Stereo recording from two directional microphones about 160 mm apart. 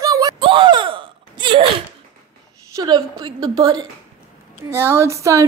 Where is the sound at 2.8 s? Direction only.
25° right (ahead or behind).